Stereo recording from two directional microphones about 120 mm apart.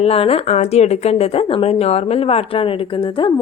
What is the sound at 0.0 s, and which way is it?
Speech, 55° left (ahead or behind).